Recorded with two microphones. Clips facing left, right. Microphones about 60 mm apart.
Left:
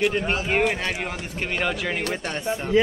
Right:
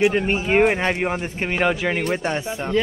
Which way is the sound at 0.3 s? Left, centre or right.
Centre.